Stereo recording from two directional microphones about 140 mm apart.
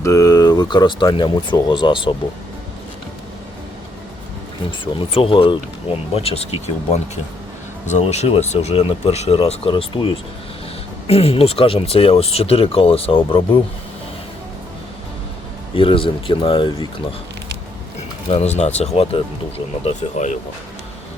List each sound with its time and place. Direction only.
0.0 s speech: 20° left (ahead or behind)
4.9 s speech: 40° left (ahead or behind)
15.7 s speech: 40° left (ahead or behind)
18.3 s speech: 50° left (ahead or behind)